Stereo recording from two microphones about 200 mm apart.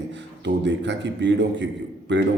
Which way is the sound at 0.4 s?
60° right (ahead or behind).